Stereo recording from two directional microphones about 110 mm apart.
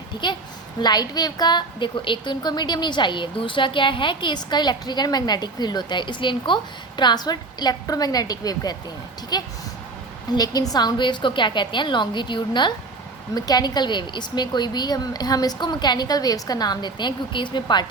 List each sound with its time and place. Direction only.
0.2 s a woman's voice: 45° left (ahead or behind)